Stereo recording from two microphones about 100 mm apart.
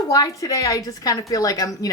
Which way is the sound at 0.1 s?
35° left (ahead or behind).